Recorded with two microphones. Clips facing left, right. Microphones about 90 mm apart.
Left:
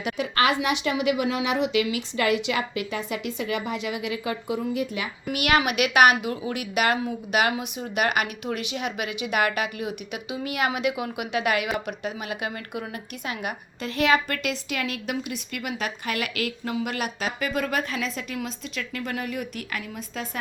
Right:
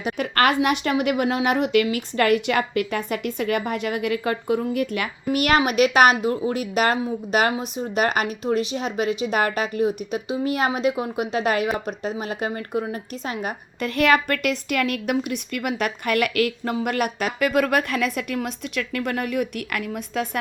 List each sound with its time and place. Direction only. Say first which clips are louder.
0.2 s a woman's voice: right 4 dB; 50° right (ahead or behind)
5.3 s speech: right 3 dB; 40° right (ahead or behind)
13.8 s a woman's voice: right 3 dB; 55° right (ahead or behind)